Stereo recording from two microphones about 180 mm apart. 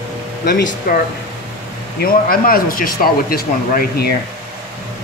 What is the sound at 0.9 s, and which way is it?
Speech, 55° left (ahead or behind).